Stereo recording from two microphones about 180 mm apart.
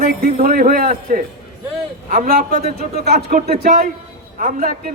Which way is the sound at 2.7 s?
35° left (ahead or behind).